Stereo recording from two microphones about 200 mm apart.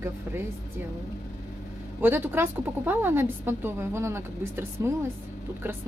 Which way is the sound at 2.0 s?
10° right (ahead or behind).